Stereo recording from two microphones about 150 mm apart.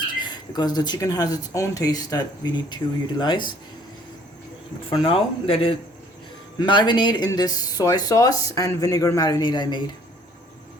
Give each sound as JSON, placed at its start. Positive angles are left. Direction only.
{"t": 0.2, "sound": "speech", "side_deg": 30}
{"t": 4.9, "sound": "speech", "side_deg": 40}